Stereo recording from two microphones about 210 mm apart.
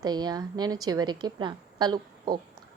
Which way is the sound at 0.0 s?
20° right (ahead or behind).